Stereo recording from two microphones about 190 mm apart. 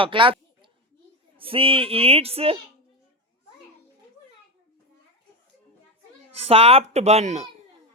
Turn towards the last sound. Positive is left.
turn(degrees=-35)  # may be behind; listen again after turning